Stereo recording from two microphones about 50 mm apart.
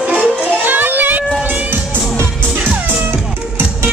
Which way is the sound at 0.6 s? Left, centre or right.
Right.